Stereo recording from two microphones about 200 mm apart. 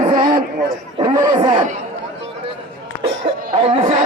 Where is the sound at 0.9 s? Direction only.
20° right (ahead or behind).